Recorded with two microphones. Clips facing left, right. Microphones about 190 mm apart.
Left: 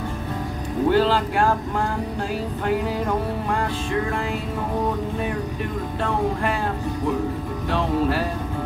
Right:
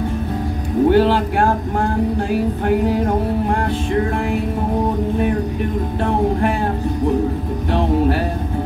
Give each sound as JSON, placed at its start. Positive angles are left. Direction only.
{"t": 0.8, "sound": "speech", "side_deg": -55}